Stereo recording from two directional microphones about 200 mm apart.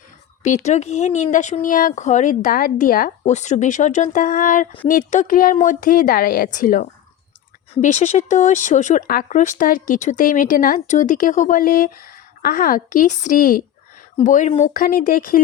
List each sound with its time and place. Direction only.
0.4 s speech: 35° left (ahead or behind)